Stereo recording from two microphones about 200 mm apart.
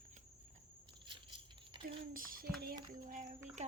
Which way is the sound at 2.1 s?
45° right (ahead or behind).